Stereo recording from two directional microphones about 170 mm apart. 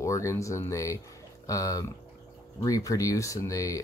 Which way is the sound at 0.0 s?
20° left (ahead or behind).